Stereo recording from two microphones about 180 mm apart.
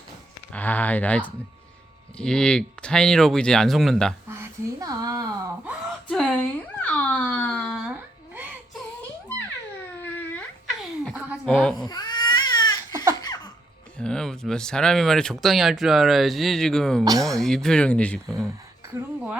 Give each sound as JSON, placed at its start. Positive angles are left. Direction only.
{"t": 0.5, "sound": "speech", "side_deg": 10}
{"t": 4.3, "sound": "a sound", "side_deg": -15}
{"t": 5.6, "sound": "a sound", "side_deg": -5}
{"t": 10.0, "sound": "a sound", "side_deg": 10}
{"t": 10.7, "sound": "giggle", "side_deg": 0}
{"t": 11.9, "sound": "crying", "side_deg": 25}
{"t": 13.2, "sound": "laughter", "side_deg": 20}
{"t": 14.0, "sound": "speech", "side_deg": 5}
{"t": 17.0, "sound": "speech", "side_deg": -20}
{"t": 17.3, "sound": "speech", "side_deg": 0}